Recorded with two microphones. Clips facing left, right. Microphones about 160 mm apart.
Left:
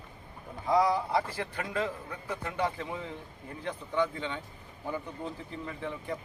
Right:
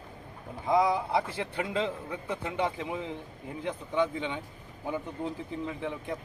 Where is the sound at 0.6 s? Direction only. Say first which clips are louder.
Right 1 dB; 20° right (ahead or behind).